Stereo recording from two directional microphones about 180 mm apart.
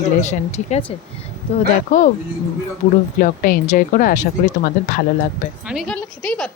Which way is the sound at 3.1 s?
50° left (ahead or behind).